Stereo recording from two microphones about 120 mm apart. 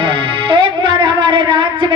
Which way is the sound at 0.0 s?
45° right (ahead or behind).